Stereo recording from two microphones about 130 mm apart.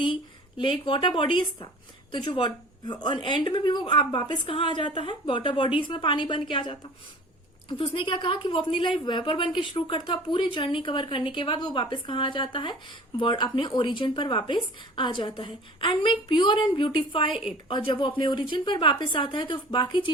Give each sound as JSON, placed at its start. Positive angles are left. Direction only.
{"t": 0.6, "sound": "a woman's voice", "side_deg": 40}